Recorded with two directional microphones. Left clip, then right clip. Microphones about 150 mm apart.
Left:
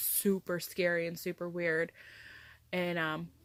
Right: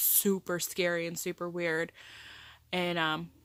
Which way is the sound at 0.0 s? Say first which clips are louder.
Right 2 dB; 25° right (ahead or behind).